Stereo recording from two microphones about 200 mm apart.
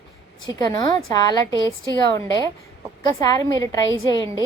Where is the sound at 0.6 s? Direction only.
20° left (ahead or behind).